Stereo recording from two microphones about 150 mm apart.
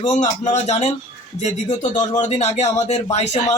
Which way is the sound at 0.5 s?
50° left (ahead or behind).